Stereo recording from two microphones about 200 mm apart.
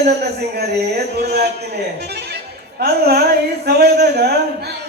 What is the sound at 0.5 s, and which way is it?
Speech, 55° right (ahead or behind).